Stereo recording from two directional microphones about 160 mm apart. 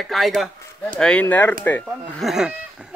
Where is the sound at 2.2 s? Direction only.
5° right (ahead or behind).